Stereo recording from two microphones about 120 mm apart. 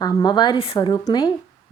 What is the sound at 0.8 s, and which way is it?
Speech, 35° left (ahead or behind).